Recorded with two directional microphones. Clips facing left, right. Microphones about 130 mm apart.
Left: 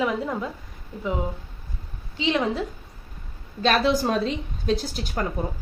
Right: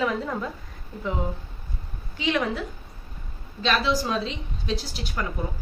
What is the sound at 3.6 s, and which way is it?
A woman's voice, 50° left (ahead or behind).